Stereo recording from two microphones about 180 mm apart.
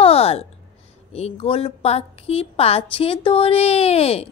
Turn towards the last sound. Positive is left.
turn(degrees=35)  # may be behind; listen again after turning